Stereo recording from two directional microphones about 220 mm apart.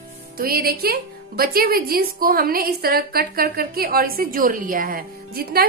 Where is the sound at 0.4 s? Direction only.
40° right (ahead or behind).